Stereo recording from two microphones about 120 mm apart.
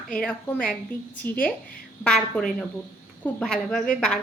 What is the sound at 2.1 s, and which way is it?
A woman's voice, 5° left (ahead or behind).